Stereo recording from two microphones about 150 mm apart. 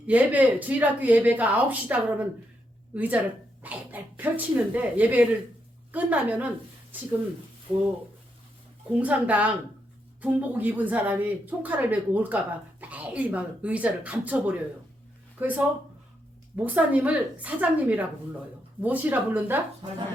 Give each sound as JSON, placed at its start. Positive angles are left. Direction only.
{"t": 0.1, "sound": "speech", "side_deg": -10}
{"t": 7.7, "sound": "speech", "side_deg": -35}
{"t": 9.0, "sound": "speech", "side_deg": -10}